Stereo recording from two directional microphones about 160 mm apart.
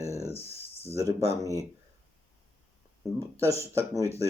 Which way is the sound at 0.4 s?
40° left (ahead or behind).